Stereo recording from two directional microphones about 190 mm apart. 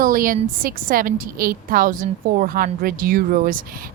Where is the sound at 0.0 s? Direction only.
45° right (ahead or behind).